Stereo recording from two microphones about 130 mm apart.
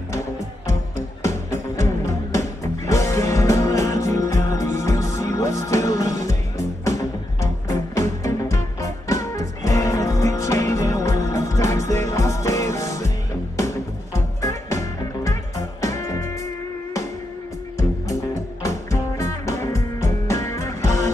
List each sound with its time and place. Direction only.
2.0 s music: 25° left (ahead or behind)
14.1 s music: 25° left (ahead or behind)
18.6 s music: 25° left (ahead or behind)